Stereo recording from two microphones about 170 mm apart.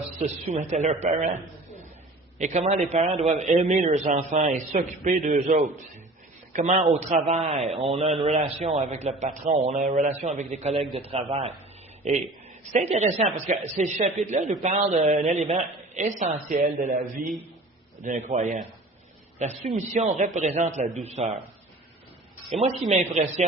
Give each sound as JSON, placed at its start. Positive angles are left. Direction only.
{"t": 0.2, "sound": "a woman's voice", "side_deg": -45}
{"t": 2.4, "sound": "a woman's voice", "side_deg": -45}
{"t": 22.6, "sound": "a woman's voice", "side_deg": -45}